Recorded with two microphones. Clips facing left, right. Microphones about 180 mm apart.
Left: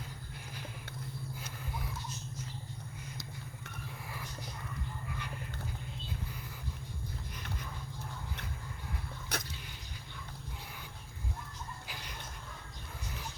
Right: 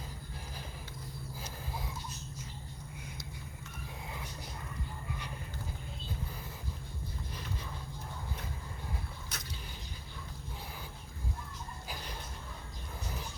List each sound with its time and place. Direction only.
9.3 s vehicle: 60° left (ahead or behind)